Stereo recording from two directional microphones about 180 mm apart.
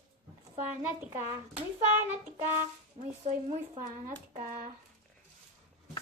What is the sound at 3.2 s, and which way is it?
Speech, 40° right (ahead or behind).